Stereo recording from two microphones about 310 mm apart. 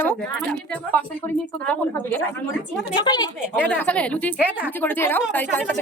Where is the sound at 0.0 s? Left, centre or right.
Centre.